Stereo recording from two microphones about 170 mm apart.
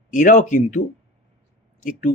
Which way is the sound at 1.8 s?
50° left (ahead or behind).